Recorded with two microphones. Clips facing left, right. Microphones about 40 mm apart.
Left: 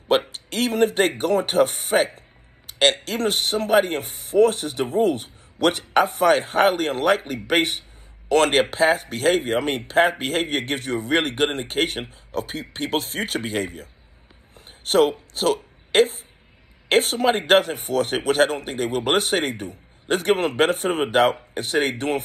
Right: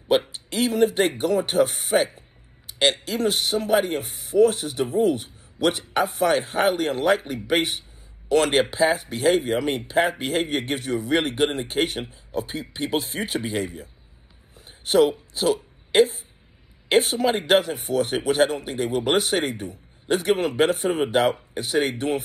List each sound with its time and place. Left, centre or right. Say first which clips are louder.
0.1 s speech: left 1 dB; left
14.5 s a sound: even; left
16.9 s speech: left 1 dB; left